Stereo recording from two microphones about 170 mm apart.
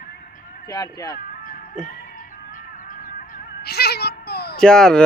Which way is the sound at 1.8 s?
50° left (ahead or behind).